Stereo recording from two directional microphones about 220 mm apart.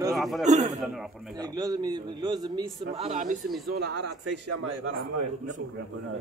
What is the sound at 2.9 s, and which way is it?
Speech, 30° right (ahead or behind).